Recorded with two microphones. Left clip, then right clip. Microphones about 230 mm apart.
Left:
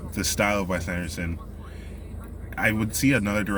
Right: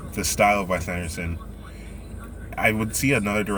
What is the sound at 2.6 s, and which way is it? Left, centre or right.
Speech, centre.